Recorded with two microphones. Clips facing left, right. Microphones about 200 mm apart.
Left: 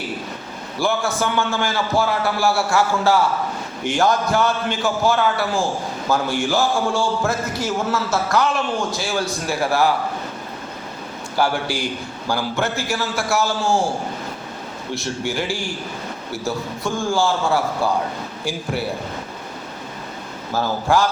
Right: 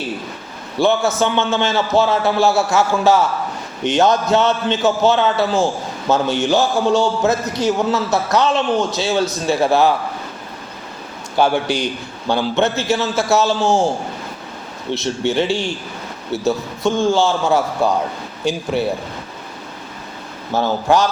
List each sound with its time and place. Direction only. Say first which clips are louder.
0.8 s a man's voice: right 5 dB; 20° right (ahead or behind)
11.3 s a man's voice: right 5 dB; 20° right (ahead or behind)
14.9 s a man's voice: right 6 dB; 25° right (ahead or behind)
20.5 s a man's voice: right 3 dB; 20° right (ahead or behind)